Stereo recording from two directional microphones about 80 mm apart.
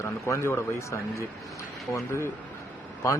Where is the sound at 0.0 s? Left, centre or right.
Left.